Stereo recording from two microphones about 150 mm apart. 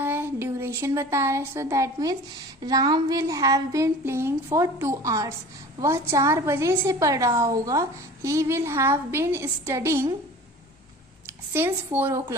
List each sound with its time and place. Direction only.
0.0 s a sound: 15° right (ahead or behind)
2.6 s a woman's voice: 25° right (ahead or behind)
11.5 s a woman's voice: 15° right (ahead or behind)